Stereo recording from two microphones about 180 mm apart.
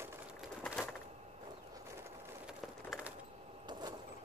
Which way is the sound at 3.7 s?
25° right (ahead or behind).